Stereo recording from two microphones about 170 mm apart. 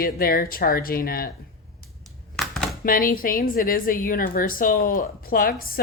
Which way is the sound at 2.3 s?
Centre (ahead or behind).